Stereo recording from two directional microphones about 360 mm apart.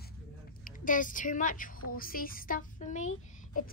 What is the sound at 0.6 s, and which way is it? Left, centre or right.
A woman's voice, left.